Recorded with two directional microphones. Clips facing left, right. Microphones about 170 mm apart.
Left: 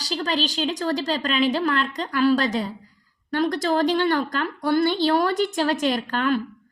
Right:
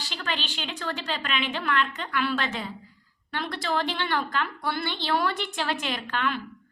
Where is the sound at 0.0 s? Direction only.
35° left (ahead or behind).